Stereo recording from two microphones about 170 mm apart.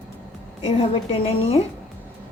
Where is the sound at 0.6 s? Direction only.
35° left (ahead or behind).